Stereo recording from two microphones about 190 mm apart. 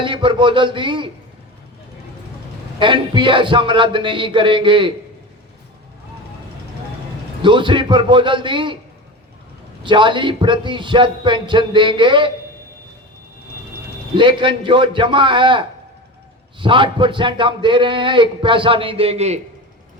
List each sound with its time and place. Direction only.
0.0 s speech: 25° right (ahead or behind)
2.7 s speech: 25° right (ahead or behind)
7.4 s speech: 25° right (ahead or behind)
9.8 s speech: 25° right (ahead or behind)
14.2 s speech: 25° right (ahead or behind)